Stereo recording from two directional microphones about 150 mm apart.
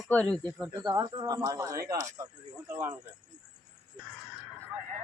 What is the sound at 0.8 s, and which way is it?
Speech, 25° right (ahead or behind).